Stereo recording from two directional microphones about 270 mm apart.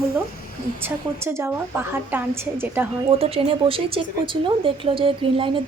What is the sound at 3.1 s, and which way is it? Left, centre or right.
Speech, right.